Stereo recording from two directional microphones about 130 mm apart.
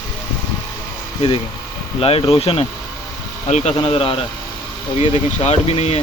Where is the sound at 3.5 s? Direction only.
55° left (ahead or behind).